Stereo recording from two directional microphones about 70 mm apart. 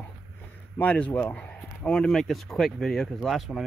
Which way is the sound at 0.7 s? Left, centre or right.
Left.